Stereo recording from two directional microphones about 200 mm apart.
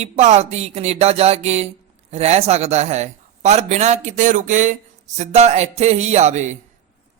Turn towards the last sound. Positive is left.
turn(degrees=-35)  # may be behind; listen again after turning